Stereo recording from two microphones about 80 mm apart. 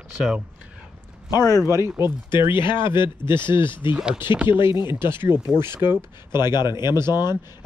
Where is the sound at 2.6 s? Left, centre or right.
Left.